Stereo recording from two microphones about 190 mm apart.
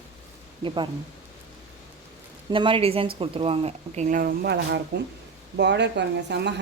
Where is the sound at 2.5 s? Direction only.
25° right (ahead or behind).